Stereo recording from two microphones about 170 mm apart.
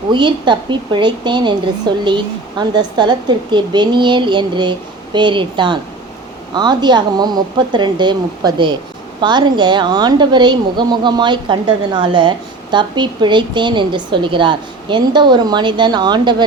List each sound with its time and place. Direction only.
0.1 s a woman's voice: 25° right (ahead or behind)